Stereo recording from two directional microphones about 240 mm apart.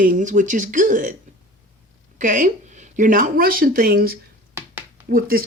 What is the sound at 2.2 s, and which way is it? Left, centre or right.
Speech, right.